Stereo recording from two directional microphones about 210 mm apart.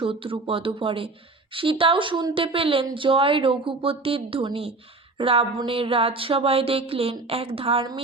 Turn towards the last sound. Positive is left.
turn(degrees=-25)  # may be behind; listen again after turning